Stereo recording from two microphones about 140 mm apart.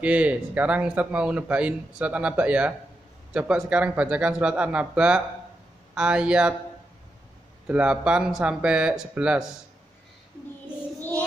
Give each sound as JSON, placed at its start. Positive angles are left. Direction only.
{"t": 0.0, "sound": "speech", "side_deg": -10}
{"t": 7.6, "sound": "speech", "side_deg": -10}